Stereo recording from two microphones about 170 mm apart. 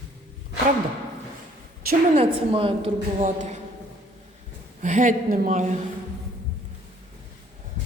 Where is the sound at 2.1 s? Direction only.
35° right (ahead or behind).